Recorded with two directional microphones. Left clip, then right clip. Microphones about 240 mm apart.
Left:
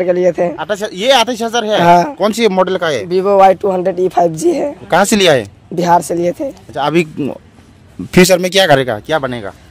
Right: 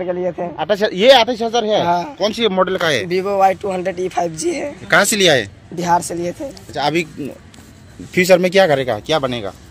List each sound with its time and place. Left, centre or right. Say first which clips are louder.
0.0 s speech: left 9 dB; left
0.7 s speech: right 3 dB; centre
1.1 s speech: left 1 dB; left
1.7 s speech: left 12 dB; left
2.1 s speech: left 5 dB; left
2.5 s speech: left 3 dB; left
3.2 s speech: left 9 dB; left
8.3 s speech: even; centre
8.8 s speech: left 2 dB; left